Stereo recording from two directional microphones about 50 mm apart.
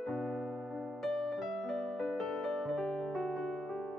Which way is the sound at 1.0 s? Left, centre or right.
Centre.